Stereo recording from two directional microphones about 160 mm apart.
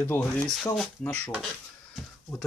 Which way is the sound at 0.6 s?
Centre (ahead or behind).